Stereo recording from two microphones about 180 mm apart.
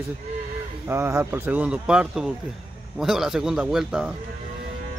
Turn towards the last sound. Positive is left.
turn(degrees=-5)  # may be behind; listen again after turning